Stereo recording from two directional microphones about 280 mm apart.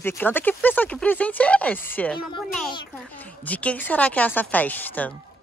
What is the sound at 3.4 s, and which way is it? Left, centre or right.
Speech, centre.